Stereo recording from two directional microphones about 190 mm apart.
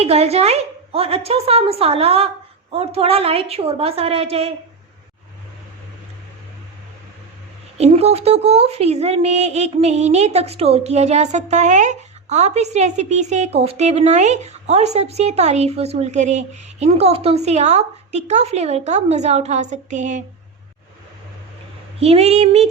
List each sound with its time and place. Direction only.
0.0 s speech: 30° right (ahead or behind)
7.8 s speech: 35° right (ahead or behind)
21.9 s speech: 30° right (ahead or behind)